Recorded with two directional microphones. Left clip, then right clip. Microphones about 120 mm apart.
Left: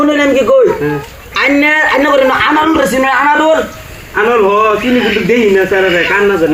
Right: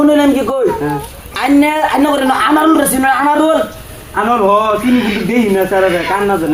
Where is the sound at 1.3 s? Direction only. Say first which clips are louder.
Left 3 dB; 40° right (ahead or behind).